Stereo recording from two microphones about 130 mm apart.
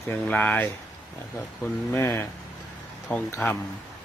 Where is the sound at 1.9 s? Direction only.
20° left (ahead or behind).